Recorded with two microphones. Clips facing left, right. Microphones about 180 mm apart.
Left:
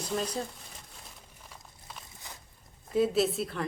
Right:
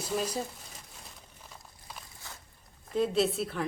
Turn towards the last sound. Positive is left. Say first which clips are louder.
# even
turn(degrees=0)  # may be behind; listen again after turning